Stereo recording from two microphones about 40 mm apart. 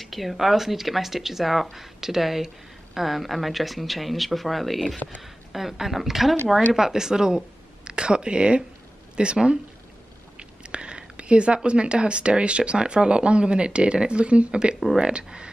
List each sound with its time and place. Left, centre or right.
0.0 s a woman's voice: centre; by 9.6 s right
10.7 s speech: right